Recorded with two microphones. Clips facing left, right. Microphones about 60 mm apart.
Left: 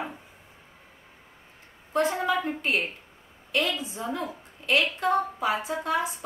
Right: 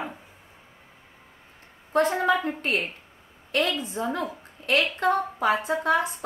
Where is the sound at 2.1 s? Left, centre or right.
Right.